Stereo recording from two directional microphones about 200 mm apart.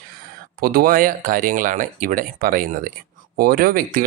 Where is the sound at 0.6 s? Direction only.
45° right (ahead or behind).